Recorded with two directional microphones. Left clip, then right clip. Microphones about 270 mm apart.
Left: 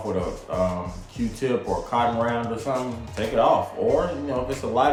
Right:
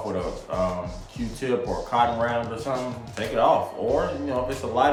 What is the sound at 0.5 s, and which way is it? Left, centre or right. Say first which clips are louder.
Speech: left 1 dB; centre.